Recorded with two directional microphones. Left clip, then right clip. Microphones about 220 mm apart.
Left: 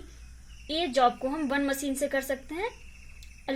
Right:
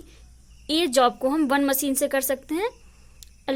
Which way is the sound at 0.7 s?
40° right (ahead or behind).